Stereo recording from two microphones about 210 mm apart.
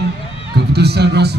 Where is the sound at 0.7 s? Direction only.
50° right (ahead or behind).